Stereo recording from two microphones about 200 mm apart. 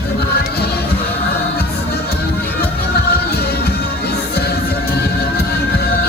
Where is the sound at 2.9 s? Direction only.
50° left (ahead or behind).